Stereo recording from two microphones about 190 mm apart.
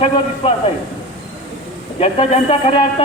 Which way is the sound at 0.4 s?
25° left (ahead or behind).